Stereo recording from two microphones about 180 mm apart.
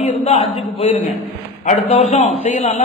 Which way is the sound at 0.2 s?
35° left (ahead or behind).